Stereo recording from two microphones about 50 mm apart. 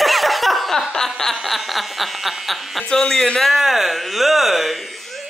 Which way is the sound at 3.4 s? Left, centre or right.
Centre.